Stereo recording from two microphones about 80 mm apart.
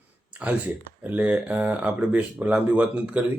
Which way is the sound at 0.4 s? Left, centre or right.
Centre.